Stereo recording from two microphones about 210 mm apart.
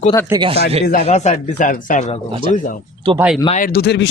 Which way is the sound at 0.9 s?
35° left (ahead or behind).